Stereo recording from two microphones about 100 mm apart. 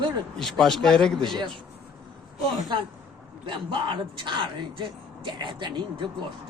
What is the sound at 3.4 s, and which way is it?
Speech, 55° right (ahead or behind).